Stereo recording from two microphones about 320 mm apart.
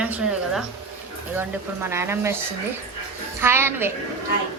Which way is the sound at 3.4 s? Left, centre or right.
Centre.